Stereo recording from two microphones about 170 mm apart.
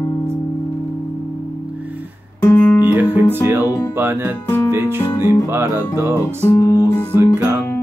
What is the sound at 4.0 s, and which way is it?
Music, 10° right (ahead or behind).